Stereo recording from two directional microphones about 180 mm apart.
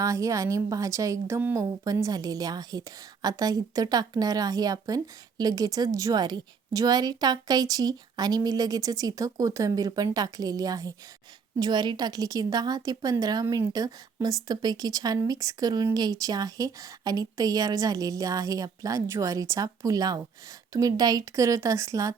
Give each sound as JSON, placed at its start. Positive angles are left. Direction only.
{"t": 0.0, "sound": "a woman's voice", "side_deg": -20}